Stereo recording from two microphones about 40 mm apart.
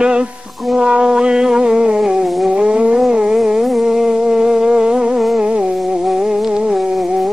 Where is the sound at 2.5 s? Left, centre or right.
Right.